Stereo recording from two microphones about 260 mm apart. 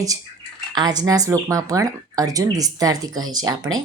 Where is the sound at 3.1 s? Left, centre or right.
Right.